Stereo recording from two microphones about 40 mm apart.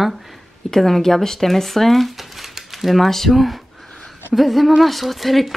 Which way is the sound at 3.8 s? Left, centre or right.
Centre.